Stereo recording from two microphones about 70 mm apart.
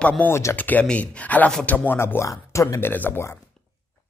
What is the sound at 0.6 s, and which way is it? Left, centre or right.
Speech, left.